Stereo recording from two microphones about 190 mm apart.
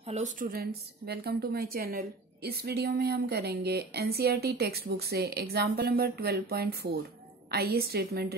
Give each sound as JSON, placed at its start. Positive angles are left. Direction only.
{"t": 0.0, "sound": "a woman's voice", "side_deg": -35}